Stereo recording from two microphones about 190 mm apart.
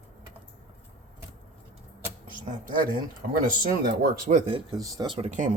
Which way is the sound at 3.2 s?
50° right (ahead or behind).